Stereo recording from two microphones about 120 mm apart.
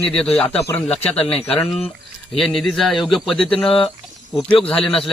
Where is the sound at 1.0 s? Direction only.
55° left (ahead or behind).